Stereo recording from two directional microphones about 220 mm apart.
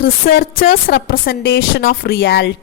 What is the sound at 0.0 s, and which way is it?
A woman's voice, 45° left (ahead or behind).